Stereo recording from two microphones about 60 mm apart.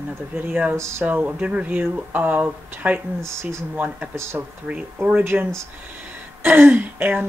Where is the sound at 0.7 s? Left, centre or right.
Right.